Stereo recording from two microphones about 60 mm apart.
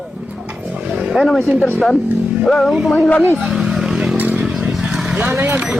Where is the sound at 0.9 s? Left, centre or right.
Centre.